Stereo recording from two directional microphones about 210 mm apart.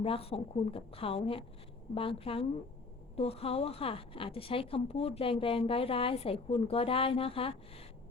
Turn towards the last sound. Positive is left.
turn(degrees=25)  # may be behind; listen again after turning